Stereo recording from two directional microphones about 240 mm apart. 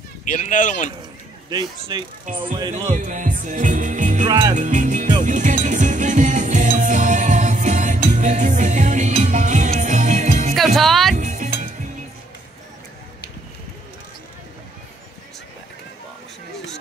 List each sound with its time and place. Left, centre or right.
0.2 s speech: left
1.5 s speech: centre
2.2 s speech: right
2.9 s music: right
4.3 s music: centre
4.6 s speech: right
5.2 s music: right
10.5 s music: centre
11.1 s music: right